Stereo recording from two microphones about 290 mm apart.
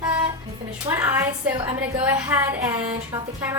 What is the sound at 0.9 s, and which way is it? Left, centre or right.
A woman's voice, centre.